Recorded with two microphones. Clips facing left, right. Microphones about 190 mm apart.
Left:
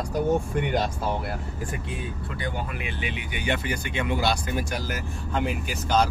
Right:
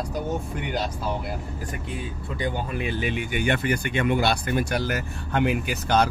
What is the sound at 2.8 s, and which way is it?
Speech, 40° right (ahead or behind).